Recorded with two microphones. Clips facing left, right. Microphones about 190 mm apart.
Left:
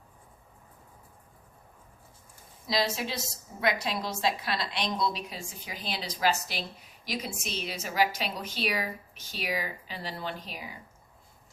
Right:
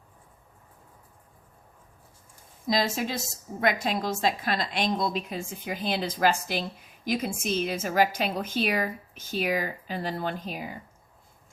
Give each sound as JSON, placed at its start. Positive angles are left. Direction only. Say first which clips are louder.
{"t": 2.6, "sound": "a woman's voice", "louder": "right 3 dB", "side_deg": -45}